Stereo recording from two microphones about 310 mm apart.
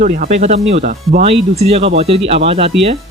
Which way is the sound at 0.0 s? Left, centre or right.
Right.